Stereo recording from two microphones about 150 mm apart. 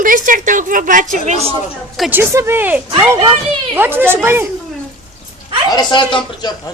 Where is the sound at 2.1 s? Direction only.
15° right (ahead or behind).